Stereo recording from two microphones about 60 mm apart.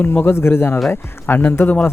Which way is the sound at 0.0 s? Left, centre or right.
Left.